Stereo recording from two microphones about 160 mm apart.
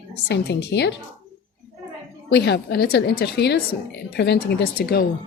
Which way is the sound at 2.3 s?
90° left.